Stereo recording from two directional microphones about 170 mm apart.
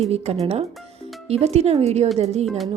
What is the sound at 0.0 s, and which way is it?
Speech, 40° right (ahead or behind).